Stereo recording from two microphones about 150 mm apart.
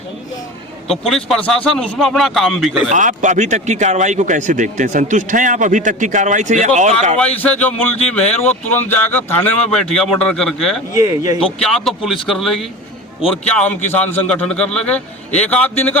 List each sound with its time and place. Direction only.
0.9 s speech: 5° left (ahead or behind)
2.9 s speech: 55° right (ahead or behind)
7.2 s a man's voice: 10° left (ahead or behind)
10.9 s speech: 20° right (ahead or behind)
11.6 s a man's voice: centre (ahead or behind)